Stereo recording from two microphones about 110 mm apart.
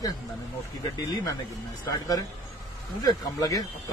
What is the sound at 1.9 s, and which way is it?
Speech, 35° left (ahead or behind).